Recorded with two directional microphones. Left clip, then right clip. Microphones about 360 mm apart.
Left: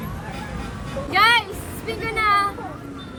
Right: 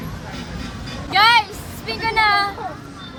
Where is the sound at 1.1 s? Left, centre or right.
Centre.